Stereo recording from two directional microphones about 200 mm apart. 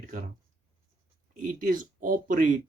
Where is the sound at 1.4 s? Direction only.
45° right (ahead or behind).